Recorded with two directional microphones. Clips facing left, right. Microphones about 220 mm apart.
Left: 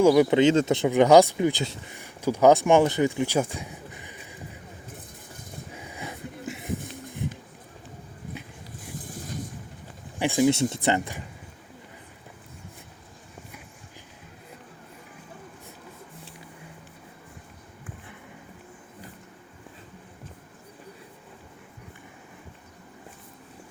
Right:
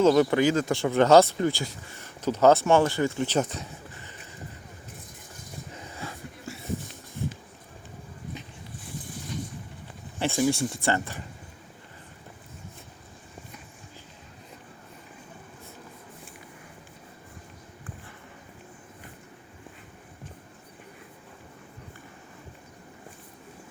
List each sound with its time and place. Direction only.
0.0 s speech: 15° left (ahead or behind)
5.7 s a sound: 10° left (ahead or behind)
10.2 s speech: 15° left (ahead or behind)